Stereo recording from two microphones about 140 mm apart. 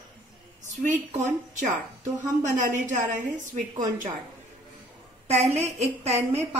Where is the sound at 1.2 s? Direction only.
60° right (ahead or behind).